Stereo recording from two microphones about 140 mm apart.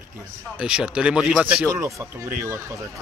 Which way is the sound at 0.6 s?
5° right (ahead or behind).